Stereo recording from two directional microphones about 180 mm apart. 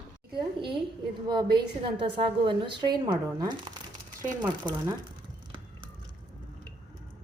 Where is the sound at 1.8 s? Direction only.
30° right (ahead or behind).